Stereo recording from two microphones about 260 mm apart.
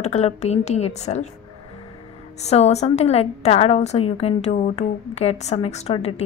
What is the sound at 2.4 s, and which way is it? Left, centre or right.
A woman's voice, left.